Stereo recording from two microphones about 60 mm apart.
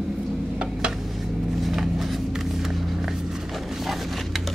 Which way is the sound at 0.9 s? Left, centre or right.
Centre.